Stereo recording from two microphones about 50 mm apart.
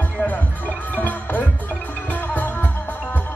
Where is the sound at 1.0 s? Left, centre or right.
Left.